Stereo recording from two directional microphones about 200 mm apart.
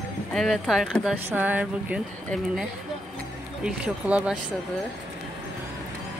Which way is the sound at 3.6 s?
5° right (ahead or behind).